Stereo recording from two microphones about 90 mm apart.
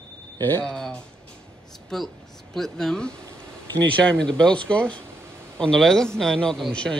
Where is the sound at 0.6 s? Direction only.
5° left (ahead or behind).